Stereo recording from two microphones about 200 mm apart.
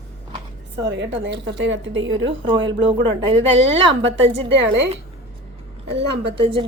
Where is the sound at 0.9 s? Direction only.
60° right (ahead or behind).